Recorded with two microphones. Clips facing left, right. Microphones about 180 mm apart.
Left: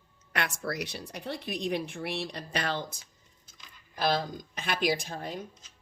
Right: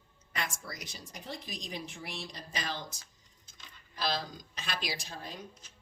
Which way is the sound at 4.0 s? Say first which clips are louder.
Left 6 dB; 55° left (ahead or behind).